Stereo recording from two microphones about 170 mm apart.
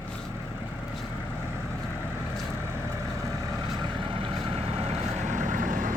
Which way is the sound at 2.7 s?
15° right (ahead or behind).